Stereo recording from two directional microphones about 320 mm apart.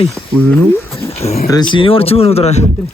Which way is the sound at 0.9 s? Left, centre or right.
Centre.